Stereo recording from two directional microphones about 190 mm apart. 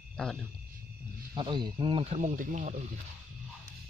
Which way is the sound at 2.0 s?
40° right (ahead or behind).